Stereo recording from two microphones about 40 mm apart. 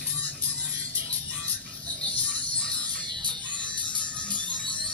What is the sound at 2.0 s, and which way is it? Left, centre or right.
Music, left.